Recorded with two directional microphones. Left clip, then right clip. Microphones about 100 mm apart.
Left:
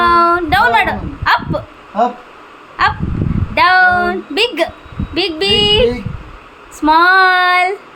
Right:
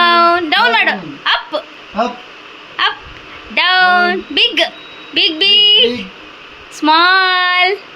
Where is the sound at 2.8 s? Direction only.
15° left (ahead or behind).